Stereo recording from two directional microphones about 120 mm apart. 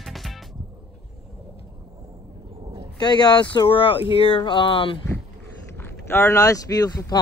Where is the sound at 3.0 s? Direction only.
35° left (ahead or behind).